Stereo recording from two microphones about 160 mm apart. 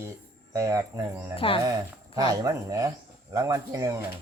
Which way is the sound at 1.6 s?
25° right (ahead or behind).